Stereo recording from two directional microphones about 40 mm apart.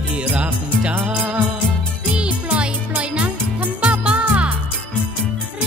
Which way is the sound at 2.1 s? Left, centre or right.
Right.